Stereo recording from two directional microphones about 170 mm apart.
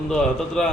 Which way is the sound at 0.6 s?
5° left (ahead or behind).